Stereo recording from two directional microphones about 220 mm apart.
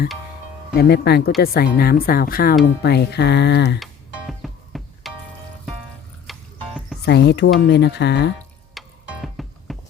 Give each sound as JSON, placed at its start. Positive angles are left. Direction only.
{"t": 0.8, "sound": "speech", "side_deg": 45}
{"t": 4.3, "sound": "music", "side_deg": 0}
{"t": 6.3, "sound": "music", "side_deg": 0}
{"t": 7.0, "sound": "speech", "side_deg": 50}
{"t": 8.8, "sound": "music", "side_deg": 0}